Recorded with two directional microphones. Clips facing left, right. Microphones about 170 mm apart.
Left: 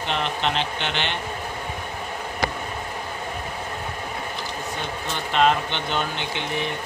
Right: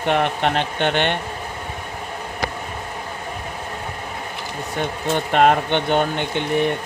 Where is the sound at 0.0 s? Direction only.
55° right (ahead or behind).